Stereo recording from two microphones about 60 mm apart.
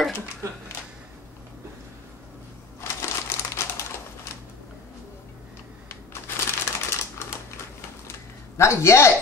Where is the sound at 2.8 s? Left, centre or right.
Left.